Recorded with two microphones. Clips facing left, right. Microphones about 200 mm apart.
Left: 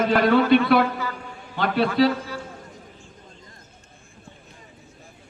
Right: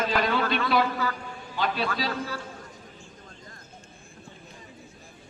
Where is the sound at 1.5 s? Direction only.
60° left (ahead or behind).